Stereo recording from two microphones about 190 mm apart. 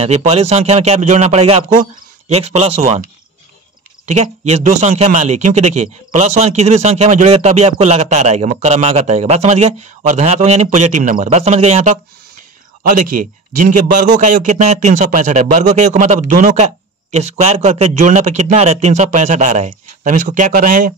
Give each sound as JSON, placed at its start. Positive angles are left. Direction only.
{"t": 0.0, "sound": "a man's voice", "side_deg": -35}